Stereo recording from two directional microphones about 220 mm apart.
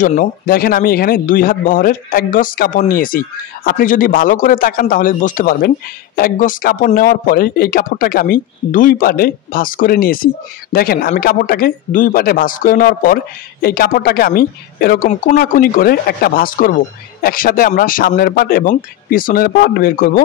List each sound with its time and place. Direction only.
0.0 s speech: 40° left (ahead or behind)